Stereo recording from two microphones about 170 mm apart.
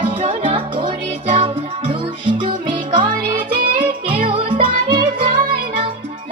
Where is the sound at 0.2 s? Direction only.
30° right (ahead or behind).